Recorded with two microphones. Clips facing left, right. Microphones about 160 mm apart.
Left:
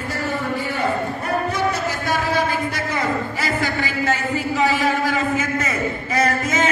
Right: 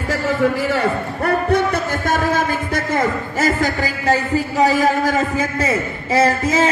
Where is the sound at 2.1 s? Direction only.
45° right (ahead or behind).